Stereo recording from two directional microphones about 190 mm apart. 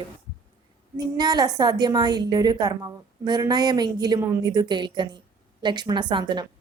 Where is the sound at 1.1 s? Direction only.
20° right (ahead or behind).